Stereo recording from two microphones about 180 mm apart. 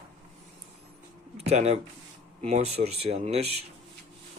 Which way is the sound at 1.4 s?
35° right (ahead or behind).